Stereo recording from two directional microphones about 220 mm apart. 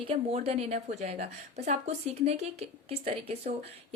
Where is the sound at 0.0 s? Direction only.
25° right (ahead or behind).